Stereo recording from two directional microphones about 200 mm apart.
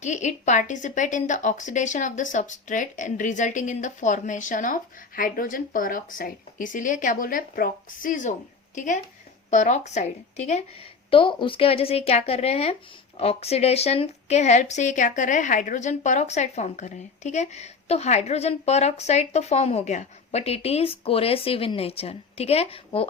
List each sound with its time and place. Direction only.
0.0 s a woman's voice: 35° left (ahead or behind)